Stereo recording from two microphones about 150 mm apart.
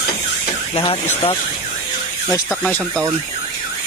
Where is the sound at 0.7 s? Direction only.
40° left (ahead or behind).